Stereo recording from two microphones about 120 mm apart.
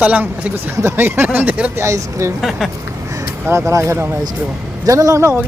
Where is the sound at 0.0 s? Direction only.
15° right (ahead or behind).